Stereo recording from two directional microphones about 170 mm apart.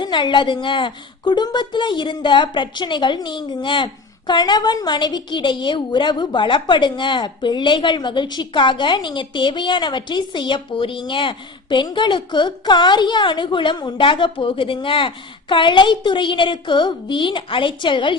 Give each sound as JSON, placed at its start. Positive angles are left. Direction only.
{"t": 0.0, "sound": "a woman's voice", "side_deg": 25}